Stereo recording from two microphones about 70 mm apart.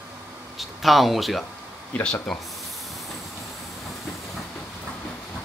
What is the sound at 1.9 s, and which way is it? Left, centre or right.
Speech, centre.